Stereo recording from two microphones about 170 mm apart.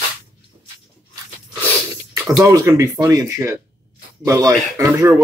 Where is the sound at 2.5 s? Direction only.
15° right (ahead or behind).